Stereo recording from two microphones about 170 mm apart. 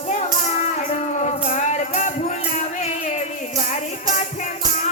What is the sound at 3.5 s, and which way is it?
Music, 45° left (ahead or behind).